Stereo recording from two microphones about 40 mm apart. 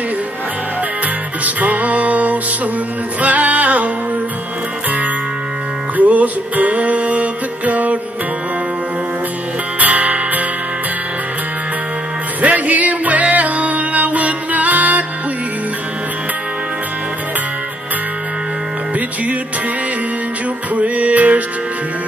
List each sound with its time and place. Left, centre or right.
1.4 s music: right
5.9 s music: right
9.8 s music: right
12.4 s music: right
20.7 s music: right